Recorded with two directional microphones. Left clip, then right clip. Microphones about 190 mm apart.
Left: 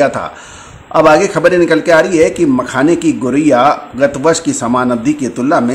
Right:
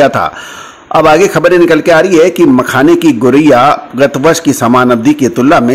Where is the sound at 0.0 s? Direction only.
35° right (ahead or behind).